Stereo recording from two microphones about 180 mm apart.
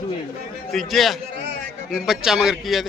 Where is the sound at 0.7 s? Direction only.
Centre (ahead or behind).